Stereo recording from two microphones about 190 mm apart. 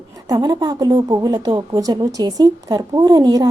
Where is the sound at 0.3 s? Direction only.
20° right (ahead or behind).